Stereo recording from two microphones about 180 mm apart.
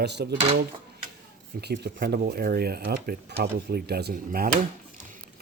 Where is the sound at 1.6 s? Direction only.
65° right (ahead or behind).